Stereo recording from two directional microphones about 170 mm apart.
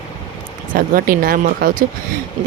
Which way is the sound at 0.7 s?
55° right (ahead or behind).